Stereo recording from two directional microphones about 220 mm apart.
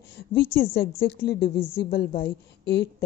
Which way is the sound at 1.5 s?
25° left (ahead or behind).